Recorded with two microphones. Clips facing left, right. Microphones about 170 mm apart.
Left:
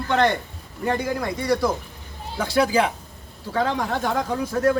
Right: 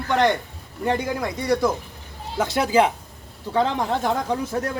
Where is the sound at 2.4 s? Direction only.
20° right (ahead or behind).